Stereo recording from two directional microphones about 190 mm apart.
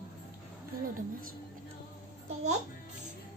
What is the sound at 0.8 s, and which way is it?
Music, 45° right (ahead or behind).